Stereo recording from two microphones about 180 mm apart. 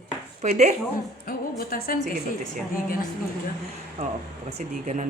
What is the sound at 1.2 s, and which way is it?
Speech, 55° left (ahead or behind).